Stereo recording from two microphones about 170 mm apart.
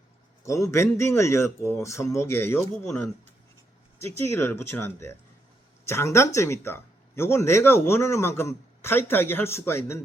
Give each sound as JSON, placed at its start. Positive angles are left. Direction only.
{"t": 0.4, "sound": "speech", "side_deg": 15}
{"t": 4.2, "sound": "speech", "side_deg": 15}